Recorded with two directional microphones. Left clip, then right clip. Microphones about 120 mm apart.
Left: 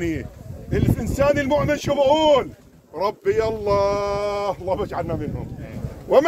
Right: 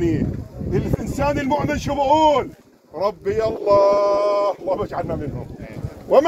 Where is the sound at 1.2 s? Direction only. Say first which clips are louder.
Left 2 dB; 40° left (ahead or behind).